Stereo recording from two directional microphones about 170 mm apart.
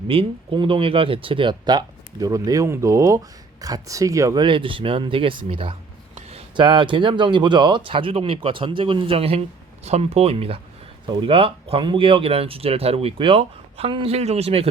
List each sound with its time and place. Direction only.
0.1 s speech: 30° right (ahead or behind)
4.4 s speech: 30° right (ahead or behind)